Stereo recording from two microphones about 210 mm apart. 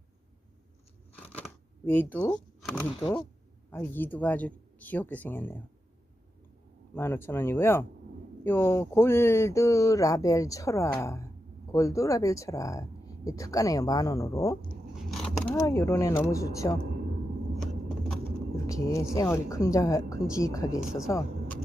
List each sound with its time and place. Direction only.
1.4 s a sound: 10° left (ahead or behind)
3.7 s speech: 10° left (ahead or behind)
6.9 s speech: 10° left (ahead or behind)
15.1 s a sound: centre (ahead or behind)
15.5 s speech: 15° left (ahead or behind)
18.5 s speech: 15° left (ahead or behind)